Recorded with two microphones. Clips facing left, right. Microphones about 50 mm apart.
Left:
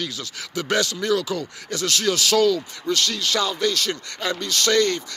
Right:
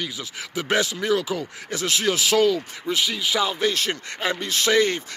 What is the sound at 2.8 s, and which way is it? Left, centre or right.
Speech, centre.